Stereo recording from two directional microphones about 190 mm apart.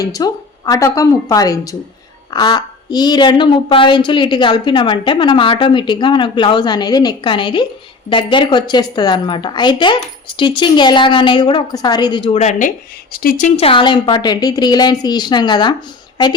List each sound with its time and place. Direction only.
0.0 s a woman's voice: 20° left (ahead or behind); by 13.5 s 45° left (ahead or behind)
13.6 s a woman's voice: 30° left (ahead or behind)